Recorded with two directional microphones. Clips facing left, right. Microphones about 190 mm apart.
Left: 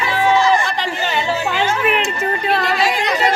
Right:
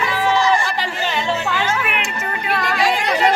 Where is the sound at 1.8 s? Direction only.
35° left (ahead or behind).